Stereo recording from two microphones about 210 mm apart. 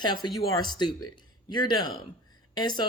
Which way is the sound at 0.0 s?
20° left (ahead or behind).